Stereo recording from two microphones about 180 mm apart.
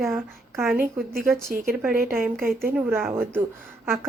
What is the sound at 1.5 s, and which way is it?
Speech, 50° right (ahead or behind).